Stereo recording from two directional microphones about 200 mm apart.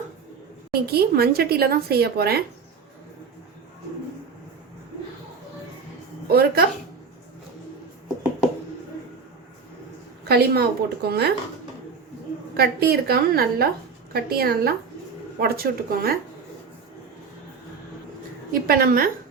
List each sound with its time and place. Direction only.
0.7 s a woman's voice: 50° right (ahead or behind)
6.2 s speech: 50° right (ahead or behind)
10.2 s a woman's voice: 55° right (ahead or behind)
12.5 s a woman's voice: 50° right (ahead or behind)
18.7 s a woman's voice: 50° right (ahead or behind)